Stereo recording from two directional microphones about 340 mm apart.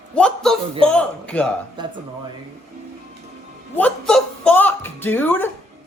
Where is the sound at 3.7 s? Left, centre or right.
Centre.